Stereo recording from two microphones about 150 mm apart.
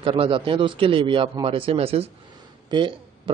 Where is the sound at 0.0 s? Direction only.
35° right (ahead or behind).